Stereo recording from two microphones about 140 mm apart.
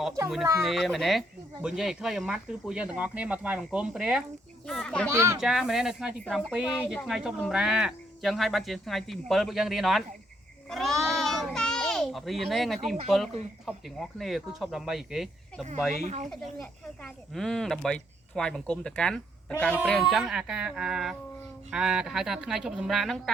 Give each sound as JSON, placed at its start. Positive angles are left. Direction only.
{"t": 0.6, "sound": "speech", "side_deg": 0}
{"t": 5.1, "sound": "speech", "side_deg": -20}
{"t": 5.4, "sound": "a child's voice", "side_deg": -5}
{"t": 16.0, "sound": "speech", "side_deg": -60}
{"t": 16.3, "sound": "speech", "side_deg": 0}